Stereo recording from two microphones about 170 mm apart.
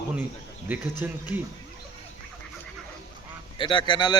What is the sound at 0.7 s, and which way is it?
Speech, 10° right (ahead or behind).